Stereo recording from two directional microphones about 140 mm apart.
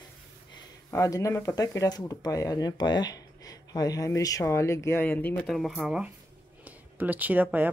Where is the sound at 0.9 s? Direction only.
25° left (ahead or behind).